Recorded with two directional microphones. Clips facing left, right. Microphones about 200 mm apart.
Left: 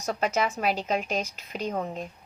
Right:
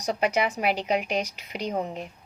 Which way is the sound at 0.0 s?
15° right (ahead or behind).